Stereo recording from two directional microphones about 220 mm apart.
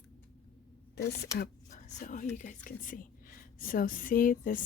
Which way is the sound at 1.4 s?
35° left (ahead or behind).